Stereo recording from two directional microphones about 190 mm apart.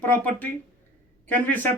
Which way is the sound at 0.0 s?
10° left (ahead or behind).